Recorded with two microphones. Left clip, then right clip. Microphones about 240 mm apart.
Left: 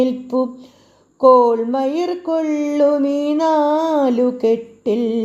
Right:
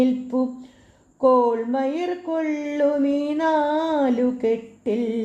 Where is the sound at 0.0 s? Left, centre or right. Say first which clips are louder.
Left 4 dB; left.